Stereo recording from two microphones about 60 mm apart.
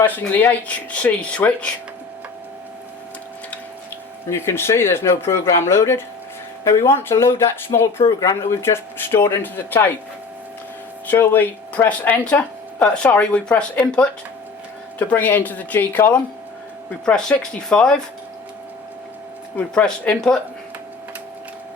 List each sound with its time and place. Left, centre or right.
0.0 s speech: left
4.3 s speech: left
9.4 s speech: left
11.1 s speech: left; by 14.1 s centre
14.9 s speech: left
17.1 s speech: centre
19.7 s speech: centre